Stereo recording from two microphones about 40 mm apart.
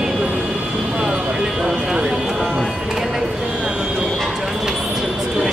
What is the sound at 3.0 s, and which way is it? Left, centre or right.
Music, centre.